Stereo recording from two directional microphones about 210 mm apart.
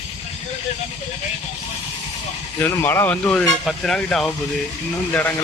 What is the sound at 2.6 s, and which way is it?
Speech, 10° left (ahead or behind).